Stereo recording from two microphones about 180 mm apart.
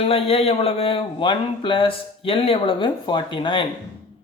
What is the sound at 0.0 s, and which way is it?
Speech, 35° left (ahead or behind).